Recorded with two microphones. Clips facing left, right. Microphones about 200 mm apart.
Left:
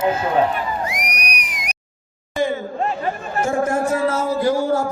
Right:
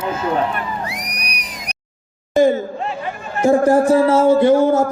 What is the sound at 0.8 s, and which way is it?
Music, 35° right (ahead or behind).